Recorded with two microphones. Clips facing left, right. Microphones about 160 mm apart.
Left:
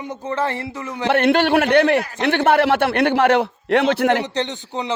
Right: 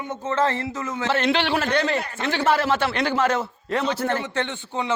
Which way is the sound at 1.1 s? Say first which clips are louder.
Left 7 dB; 60° left (ahead or behind).